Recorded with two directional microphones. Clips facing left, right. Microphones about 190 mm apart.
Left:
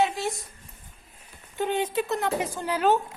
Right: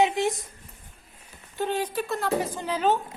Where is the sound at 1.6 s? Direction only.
20° left (ahead or behind).